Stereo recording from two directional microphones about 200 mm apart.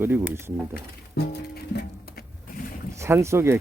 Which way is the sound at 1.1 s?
55° left (ahead or behind).